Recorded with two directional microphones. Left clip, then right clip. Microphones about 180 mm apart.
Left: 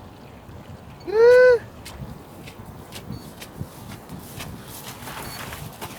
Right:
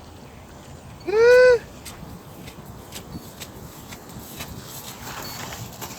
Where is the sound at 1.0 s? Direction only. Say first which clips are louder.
Even; 35° left (ahead or behind).